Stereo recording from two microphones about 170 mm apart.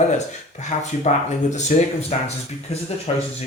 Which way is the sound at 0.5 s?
45° left (ahead or behind).